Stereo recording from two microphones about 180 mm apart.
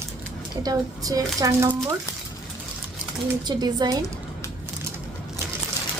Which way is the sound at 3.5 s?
20° right (ahead or behind).